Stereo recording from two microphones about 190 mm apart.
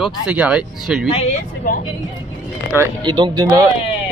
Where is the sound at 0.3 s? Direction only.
5° right (ahead or behind).